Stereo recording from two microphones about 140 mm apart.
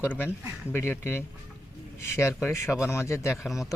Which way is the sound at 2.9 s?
20° left (ahead or behind).